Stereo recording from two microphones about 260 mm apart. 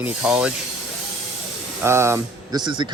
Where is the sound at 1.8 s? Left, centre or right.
Centre.